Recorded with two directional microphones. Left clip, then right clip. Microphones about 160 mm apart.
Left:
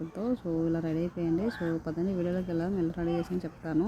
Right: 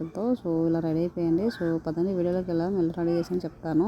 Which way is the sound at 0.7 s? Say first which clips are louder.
Right 5 dB; 15° right (ahead or behind).